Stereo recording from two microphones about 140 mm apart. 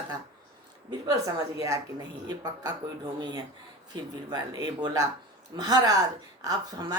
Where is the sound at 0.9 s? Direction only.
25° right (ahead or behind).